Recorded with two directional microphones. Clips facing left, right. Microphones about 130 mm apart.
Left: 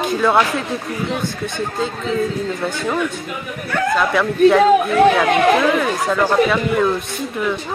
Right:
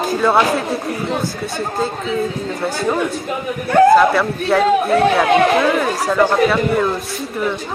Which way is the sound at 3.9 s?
Centre (ahead or behind).